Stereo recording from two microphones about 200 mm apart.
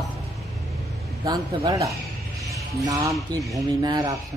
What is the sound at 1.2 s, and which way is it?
Speech, 20° right (ahead or behind).